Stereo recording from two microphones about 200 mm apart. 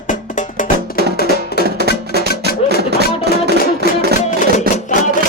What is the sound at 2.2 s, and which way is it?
Music, 50° left (ahead or behind).